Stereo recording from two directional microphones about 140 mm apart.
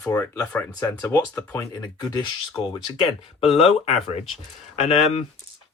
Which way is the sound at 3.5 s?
45° left (ahead or behind).